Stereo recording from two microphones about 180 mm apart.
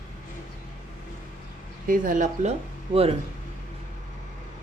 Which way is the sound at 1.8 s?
50° right (ahead or behind).